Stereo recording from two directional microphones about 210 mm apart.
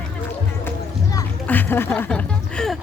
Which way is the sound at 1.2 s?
10° left (ahead or behind).